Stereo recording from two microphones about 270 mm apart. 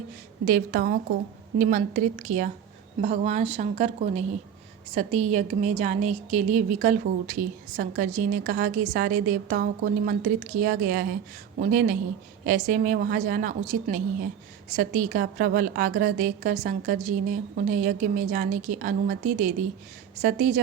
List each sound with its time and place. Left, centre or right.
0.4 s a woman's voice: right